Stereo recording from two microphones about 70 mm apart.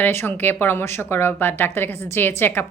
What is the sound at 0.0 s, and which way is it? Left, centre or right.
A woman's voice, left.